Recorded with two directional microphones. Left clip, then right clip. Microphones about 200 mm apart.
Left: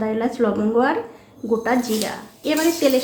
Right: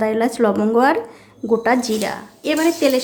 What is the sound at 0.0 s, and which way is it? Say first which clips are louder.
Speech: right 4 dB; 30° right (ahead or behind).